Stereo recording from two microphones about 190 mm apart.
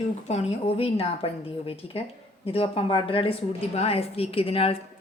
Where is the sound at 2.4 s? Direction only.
30° left (ahead or behind).